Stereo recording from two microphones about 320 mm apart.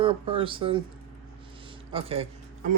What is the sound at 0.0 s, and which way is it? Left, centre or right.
Speech, centre.